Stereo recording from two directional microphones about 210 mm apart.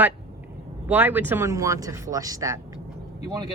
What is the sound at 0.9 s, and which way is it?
Speech, 10° right (ahead or behind).